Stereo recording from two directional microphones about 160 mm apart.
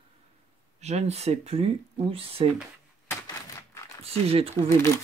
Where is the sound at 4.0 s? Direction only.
40° right (ahead or behind).